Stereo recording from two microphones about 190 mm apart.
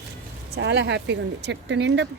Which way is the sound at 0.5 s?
60° right (ahead or behind).